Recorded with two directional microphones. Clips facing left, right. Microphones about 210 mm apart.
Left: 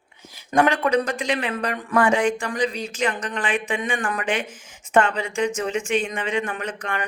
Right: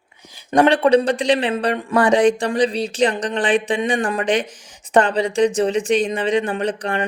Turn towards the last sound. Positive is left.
turn(degrees=-35)  # may be behind; listen again after turning